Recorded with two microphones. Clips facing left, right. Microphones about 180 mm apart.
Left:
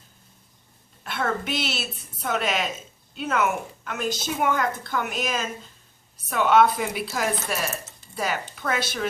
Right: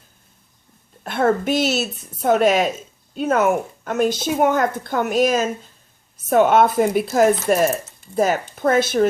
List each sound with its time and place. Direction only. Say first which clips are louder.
1.0 s speech: right 9 dB; 50° right (ahead or behind)